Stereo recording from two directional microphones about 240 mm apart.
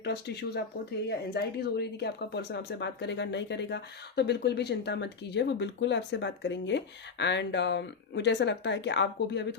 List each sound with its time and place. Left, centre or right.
0.0 s speech: left